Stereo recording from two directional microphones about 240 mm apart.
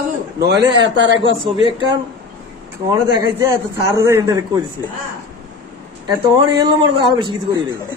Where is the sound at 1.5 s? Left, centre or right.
Right.